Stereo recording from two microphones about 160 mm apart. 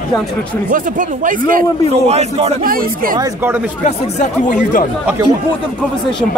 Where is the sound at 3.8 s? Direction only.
50° left (ahead or behind).